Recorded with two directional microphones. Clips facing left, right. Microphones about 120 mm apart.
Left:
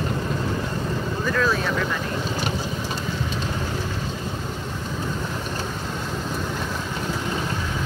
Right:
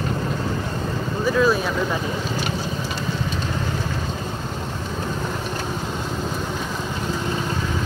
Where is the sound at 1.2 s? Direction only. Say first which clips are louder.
Right 5 dB; 5° right (ahead or behind).